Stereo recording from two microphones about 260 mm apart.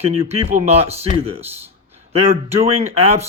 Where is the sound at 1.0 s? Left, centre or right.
Right.